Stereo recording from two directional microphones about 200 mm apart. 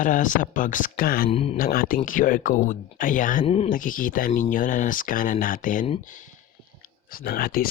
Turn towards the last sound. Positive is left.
turn(degrees=50)  # may be behind; listen again after turning